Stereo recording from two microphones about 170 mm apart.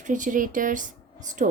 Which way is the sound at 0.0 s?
50° right (ahead or behind).